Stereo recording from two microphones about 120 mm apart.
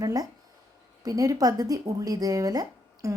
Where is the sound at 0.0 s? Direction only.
30° right (ahead or behind).